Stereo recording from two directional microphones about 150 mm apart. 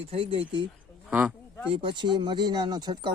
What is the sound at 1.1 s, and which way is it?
Speech, 10° right (ahead or behind).